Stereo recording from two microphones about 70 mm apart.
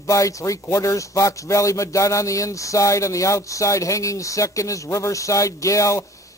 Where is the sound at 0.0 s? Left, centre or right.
Left.